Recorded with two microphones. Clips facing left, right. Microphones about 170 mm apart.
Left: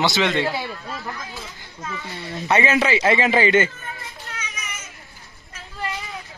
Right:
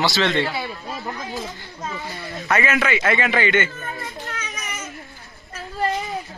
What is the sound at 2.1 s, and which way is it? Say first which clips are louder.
A man's voice: left 2 dB; 25° left (ahead or behind).